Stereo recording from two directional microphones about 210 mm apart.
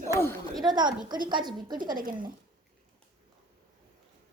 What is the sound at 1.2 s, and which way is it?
Speech, 20° right (ahead or behind).